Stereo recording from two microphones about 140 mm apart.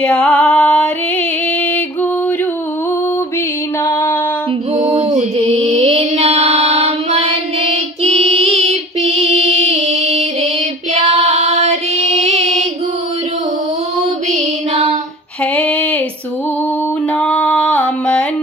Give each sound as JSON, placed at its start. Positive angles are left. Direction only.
{"t": 0.0, "sound": "music", "side_deg": 10}
{"t": 3.8, "sound": "music", "side_deg": 15}
{"t": 4.7, "sound": "music", "side_deg": -50}
{"t": 11.0, "sound": "female singing", "side_deg": -50}
{"t": 14.0, "sound": "music", "side_deg": -50}
{"t": 15.5, "sound": "a sound", "side_deg": 10}
{"t": 17.1, "sound": "music", "side_deg": 10}